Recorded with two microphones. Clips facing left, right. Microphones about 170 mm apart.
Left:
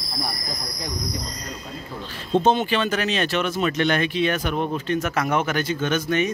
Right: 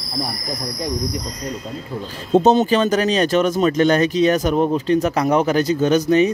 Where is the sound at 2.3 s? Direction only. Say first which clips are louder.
Right 6 dB; 40° right (ahead or behind).